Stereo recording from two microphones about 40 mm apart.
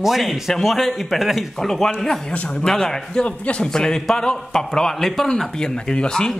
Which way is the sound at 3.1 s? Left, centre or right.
Left.